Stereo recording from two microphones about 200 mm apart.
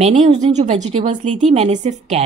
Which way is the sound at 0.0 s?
30° right (ahead or behind).